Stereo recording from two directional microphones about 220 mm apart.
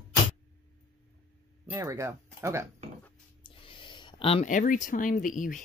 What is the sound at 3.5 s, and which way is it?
A woman's voice, 25° left (ahead or behind).